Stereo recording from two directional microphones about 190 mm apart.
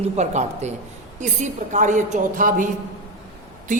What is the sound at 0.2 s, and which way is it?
A woman's voice, 35° right (ahead or behind).